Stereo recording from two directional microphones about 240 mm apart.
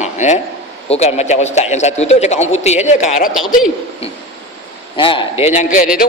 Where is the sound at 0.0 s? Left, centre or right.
Left.